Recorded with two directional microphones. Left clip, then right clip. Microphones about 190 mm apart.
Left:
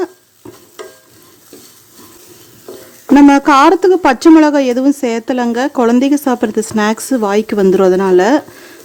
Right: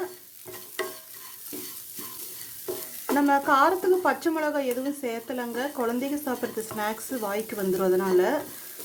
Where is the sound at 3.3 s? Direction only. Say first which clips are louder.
Left 13 dB; 50° left (ahead or behind).